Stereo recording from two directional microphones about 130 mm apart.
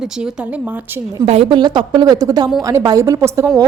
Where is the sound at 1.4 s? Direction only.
35° right (ahead or behind).